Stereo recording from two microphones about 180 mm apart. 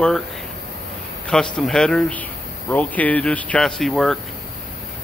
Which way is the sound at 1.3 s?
5° left (ahead or behind).